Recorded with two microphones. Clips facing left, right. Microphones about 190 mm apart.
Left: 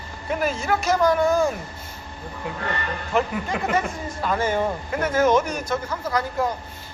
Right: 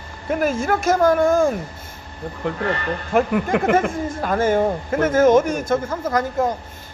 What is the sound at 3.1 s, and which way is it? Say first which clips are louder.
A man's voice: right 6 dB; 50° right (ahead or behind).